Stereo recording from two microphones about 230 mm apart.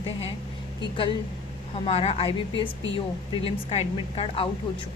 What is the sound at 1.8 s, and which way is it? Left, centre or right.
A woman's voice, left.